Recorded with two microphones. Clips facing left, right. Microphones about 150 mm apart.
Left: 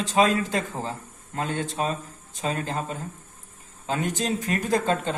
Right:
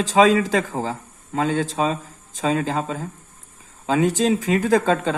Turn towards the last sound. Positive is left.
turn(degrees=-90)